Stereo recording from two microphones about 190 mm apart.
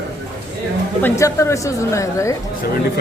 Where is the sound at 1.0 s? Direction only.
15° left (ahead or behind).